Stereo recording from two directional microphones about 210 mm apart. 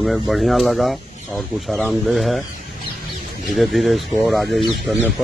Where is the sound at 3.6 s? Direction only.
Centre (ahead or behind).